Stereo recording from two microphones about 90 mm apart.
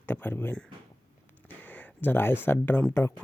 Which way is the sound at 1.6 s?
20° left (ahead or behind).